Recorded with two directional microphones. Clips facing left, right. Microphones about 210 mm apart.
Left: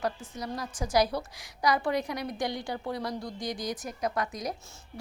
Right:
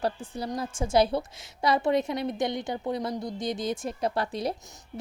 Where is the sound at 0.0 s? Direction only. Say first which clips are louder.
Right 3 dB; 30° right (ahead or behind).